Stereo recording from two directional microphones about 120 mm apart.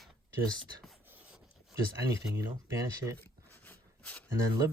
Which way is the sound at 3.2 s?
15° left (ahead or behind).